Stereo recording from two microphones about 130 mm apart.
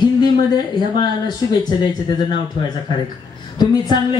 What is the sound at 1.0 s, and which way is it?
Speech, 30° left (ahead or behind).